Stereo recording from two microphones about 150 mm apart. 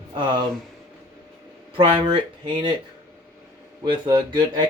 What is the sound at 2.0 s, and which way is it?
Speech, 35° right (ahead or behind).